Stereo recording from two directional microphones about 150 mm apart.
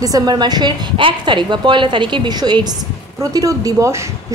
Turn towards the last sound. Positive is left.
turn(degrees=-20)  # may be behind; listen again after turning